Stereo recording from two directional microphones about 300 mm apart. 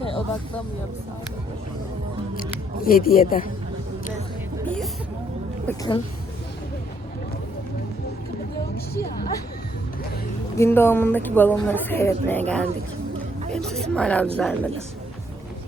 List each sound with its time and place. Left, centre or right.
2.8 s speech: left
5.6 s a woman's voice: centre
10.6 s a woman's voice: centre